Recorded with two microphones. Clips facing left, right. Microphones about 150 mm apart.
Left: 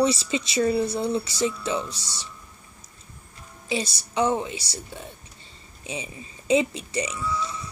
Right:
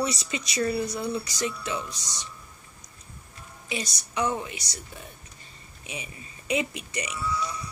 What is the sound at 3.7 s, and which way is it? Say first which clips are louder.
Speech: left 5 dB; 30° left (ahead or behind).